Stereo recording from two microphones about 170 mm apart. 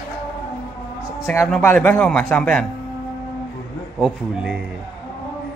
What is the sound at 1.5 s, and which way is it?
A man's voice, 10° left (ahead or behind).